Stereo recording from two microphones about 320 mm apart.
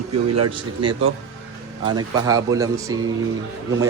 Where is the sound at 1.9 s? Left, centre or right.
Centre.